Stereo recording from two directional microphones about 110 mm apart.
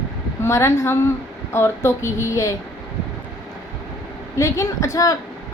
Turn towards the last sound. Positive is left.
turn(degrees=30)  # may be behind; listen again after turning